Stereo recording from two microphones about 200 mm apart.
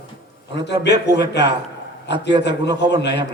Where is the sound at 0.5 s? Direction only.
60° left (ahead or behind).